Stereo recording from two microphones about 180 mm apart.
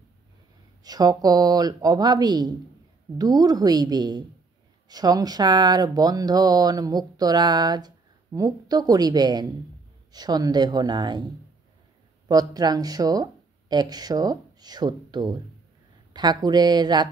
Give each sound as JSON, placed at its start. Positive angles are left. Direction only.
{"t": 0.8, "sound": "speech", "side_deg": -20}
{"t": 12.3, "sound": "speech", "side_deg": -20}